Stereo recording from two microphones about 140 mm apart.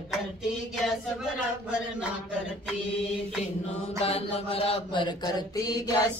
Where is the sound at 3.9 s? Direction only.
45° left (ahead or behind).